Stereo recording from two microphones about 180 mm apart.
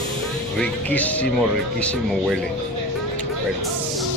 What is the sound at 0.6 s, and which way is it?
Speech, 10° left (ahead or behind).